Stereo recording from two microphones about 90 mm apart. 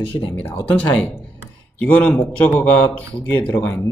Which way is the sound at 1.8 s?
20° left (ahead or behind).